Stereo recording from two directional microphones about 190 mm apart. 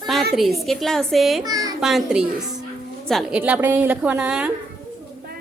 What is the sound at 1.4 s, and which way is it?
Speech, 20° right (ahead or behind).